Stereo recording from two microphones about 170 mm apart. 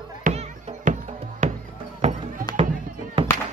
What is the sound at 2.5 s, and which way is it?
Music, 25° left (ahead or behind).